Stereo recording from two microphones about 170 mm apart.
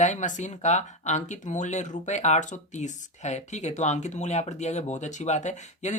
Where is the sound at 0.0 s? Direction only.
45° left (ahead or behind).